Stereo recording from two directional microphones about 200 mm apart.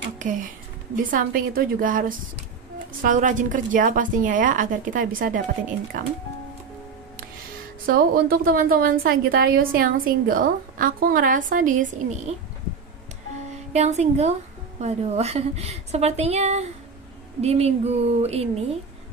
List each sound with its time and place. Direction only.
0.2 s a woman's voice: 40° right (ahead or behind)
7.8 s a woman's voice: 45° right (ahead or behind)
13.7 s a woman's voice: 35° right (ahead or behind)